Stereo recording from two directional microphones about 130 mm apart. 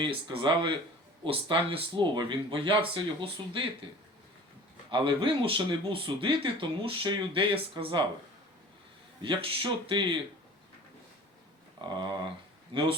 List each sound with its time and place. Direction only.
0.0 s speech: 40° right (ahead or behind)
4.9 s speech: 40° right (ahead or behind)
9.2 s speech: 40° right (ahead or behind)
11.8 s speech: 35° right (ahead or behind)